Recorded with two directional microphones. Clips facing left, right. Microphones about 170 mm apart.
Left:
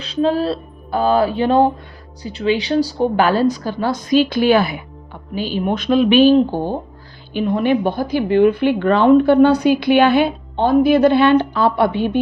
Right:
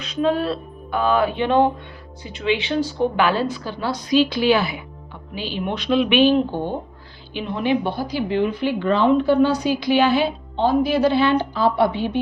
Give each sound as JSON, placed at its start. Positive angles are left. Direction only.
{"t": 0.0, "sound": "a woman's voice", "side_deg": 30}